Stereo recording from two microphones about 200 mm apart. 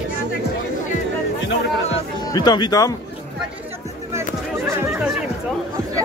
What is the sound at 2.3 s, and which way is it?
Speech, 20° left (ahead or behind).